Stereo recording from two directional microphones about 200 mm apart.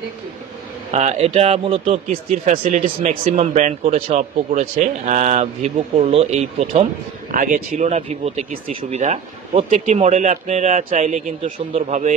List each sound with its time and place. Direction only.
0.9 s speech: 35° right (ahead or behind)
7.3 s speech: 40° right (ahead or behind)